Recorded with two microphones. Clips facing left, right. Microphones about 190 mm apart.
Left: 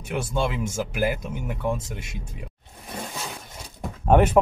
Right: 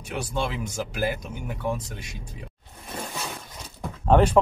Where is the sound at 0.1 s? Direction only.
25° left (ahead or behind).